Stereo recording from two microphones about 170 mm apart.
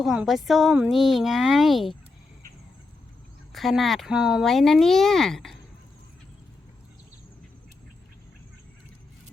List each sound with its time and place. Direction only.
0.0 s speech: centre (ahead or behind)
3.5 s speech: centre (ahead or behind)